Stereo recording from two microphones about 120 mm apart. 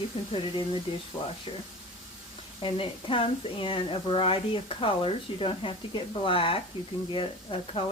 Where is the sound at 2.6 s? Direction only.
50° left (ahead or behind).